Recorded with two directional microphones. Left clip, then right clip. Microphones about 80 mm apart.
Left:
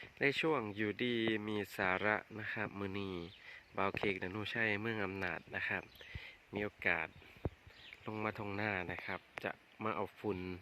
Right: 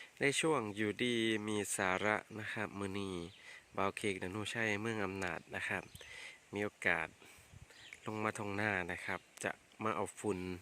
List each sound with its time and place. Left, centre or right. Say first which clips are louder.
0.0 s speech: even; centre